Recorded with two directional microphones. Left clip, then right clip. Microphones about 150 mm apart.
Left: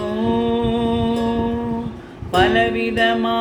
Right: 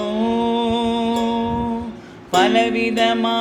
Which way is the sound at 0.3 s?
40° right (ahead or behind).